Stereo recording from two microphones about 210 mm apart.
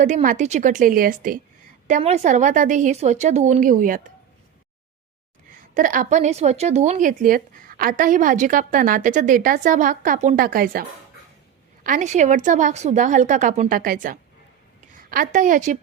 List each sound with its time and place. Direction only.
0.0 s a woman's voice: 35° right (ahead or behind)
1.9 s a woman's voice: 30° right (ahead or behind)
5.5 s a woman's voice: 40° right (ahead or behind)